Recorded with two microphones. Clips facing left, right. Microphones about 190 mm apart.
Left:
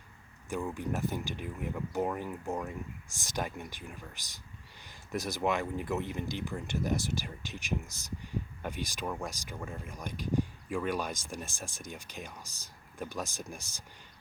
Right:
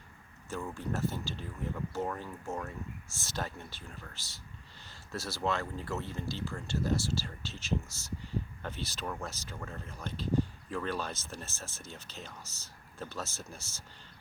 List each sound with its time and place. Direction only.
0.5 s speech: 15° left (ahead or behind)